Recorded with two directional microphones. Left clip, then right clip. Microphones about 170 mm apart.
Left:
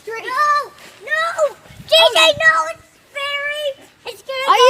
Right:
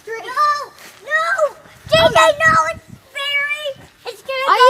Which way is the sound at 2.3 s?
25° right (ahead or behind).